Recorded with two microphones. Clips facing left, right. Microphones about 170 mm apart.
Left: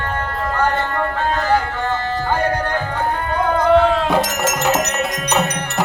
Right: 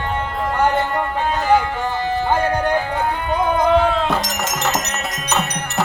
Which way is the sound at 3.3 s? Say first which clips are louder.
Left 1 dB; 15° right (ahead or behind).